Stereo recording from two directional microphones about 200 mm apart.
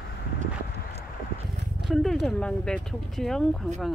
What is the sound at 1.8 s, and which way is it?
Speech, centre (ahead or behind).